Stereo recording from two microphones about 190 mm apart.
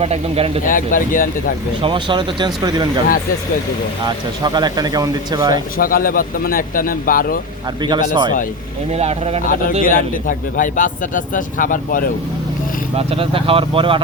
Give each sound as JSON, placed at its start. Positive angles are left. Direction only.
{"t": 0.0, "sound": "speech", "side_deg": -30}
{"t": 0.7, "sound": "a man's voice", "side_deg": 45}
{"t": 1.8, "sound": "speech", "side_deg": -25}
{"t": 4.0, "sound": "speech", "side_deg": -20}
{"t": 5.7, "sound": "a man's voice", "side_deg": 50}
{"t": 7.8, "sound": "speech", "side_deg": -20}
{"t": 8.9, "sound": "speech", "side_deg": -35}
{"t": 9.4, "sound": "a man's voice", "side_deg": 45}
{"t": 13.0, "sound": "speech", "side_deg": -30}